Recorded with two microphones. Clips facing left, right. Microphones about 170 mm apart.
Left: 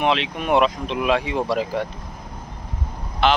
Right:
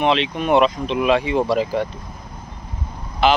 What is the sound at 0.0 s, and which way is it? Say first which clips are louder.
Speech: right 3 dB; 5° left (ahead or behind).